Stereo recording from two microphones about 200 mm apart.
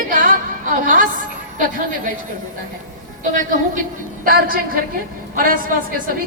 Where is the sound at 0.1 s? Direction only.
40° right (ahead or behind).